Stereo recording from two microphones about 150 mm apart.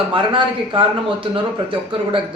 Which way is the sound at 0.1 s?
35° right (ahead or behind).